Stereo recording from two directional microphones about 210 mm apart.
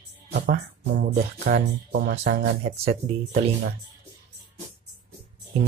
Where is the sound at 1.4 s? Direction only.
50° right (ahead or behind).